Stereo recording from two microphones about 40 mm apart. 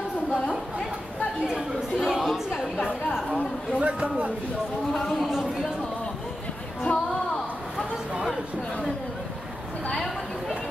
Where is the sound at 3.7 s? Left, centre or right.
Right.